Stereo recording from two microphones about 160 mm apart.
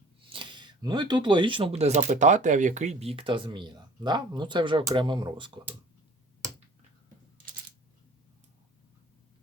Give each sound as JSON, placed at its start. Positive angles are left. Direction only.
{"t": 0.3, "sound": "speech", "side_deg": -30}